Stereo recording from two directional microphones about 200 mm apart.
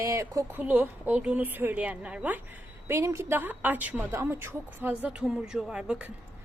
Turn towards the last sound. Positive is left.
turn(degrees=-5)  # may be behind; listen again after turning